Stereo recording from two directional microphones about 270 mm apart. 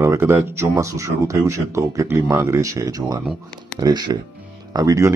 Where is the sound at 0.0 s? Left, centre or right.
Centre.